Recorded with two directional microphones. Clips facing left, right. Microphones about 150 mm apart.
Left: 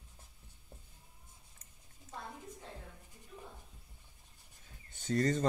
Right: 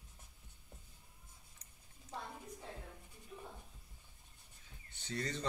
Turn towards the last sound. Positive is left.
turn(degrees=45)  # may be behind; listen again after turning